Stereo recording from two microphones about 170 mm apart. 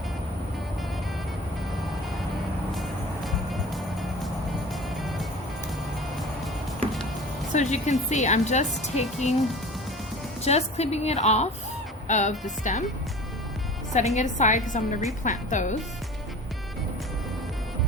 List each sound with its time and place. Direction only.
7.5 s a woman's voice: 45° left (ahead or behind)
10.4 s a woman's voice: 40° left (ahead or behind)
13.9 s a woman's voice: 40° left (ahead or behind)